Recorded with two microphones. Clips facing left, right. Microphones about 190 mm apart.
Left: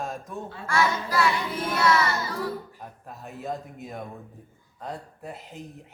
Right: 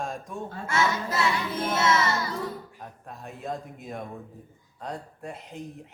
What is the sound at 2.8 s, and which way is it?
A man's voice, centre (ahead or behind).